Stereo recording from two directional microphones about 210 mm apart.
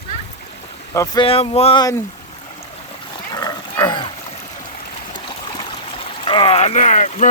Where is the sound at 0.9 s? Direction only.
15° left (ahead or behind).